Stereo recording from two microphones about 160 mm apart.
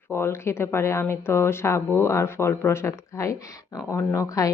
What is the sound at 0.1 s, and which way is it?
Speech, 15° left (ahead or behind).